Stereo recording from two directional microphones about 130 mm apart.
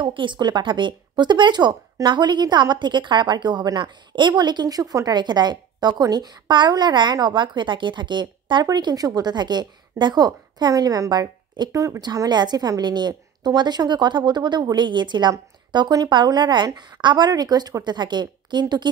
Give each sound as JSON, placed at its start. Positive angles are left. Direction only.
{"t": 0.0, "sound": "speech", "side_deg": -40}